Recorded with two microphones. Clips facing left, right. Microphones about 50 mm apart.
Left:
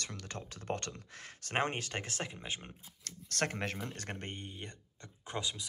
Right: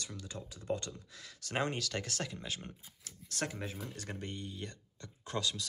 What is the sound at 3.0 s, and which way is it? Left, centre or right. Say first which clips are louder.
Speech: left 4 dB; left.